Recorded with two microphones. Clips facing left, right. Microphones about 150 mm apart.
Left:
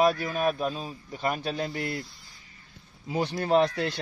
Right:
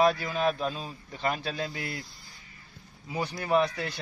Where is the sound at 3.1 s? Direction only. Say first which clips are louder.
Left 3 dB; 30° left (ahead or behind).